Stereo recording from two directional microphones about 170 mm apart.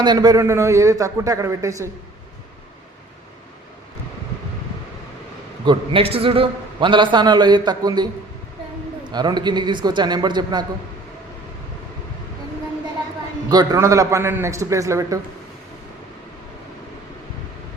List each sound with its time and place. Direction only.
0.0 s a man's voice: 25° right (ahead or behind)
5.6 s a man's voice: 35° right (ahead or behind)
13.5 s a man's voice: 20° right (ahead or behind)